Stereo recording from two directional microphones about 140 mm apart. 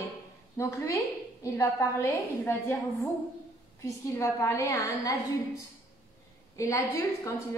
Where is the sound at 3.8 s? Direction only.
20° left (ahead or behind).